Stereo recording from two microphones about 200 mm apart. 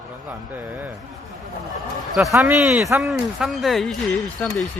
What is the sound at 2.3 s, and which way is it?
Speech, 10° right (ahead or behind).